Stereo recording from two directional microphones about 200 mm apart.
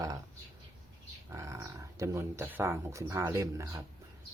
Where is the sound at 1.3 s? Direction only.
15° right (ahead or behind).